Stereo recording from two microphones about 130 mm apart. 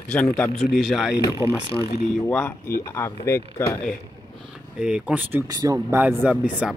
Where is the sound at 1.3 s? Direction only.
25° right (ahead or behind).